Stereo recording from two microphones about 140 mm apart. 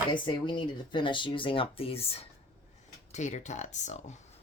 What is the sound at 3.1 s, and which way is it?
Speech, 60° left (ahead or behind).